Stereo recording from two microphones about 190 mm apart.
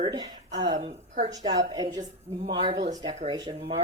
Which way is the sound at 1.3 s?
20° right (ahead or behind).